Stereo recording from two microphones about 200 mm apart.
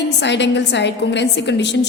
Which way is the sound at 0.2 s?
60° left (ahead or behind).